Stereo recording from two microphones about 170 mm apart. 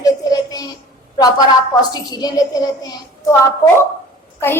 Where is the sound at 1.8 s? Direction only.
25° left (ahead or behind).